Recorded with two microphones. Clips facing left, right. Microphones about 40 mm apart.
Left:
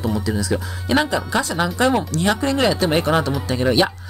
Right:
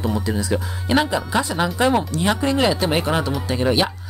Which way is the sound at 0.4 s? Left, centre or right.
Centre.